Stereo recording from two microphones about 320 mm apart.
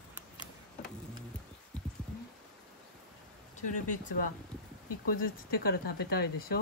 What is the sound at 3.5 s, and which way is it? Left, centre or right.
Speech, left.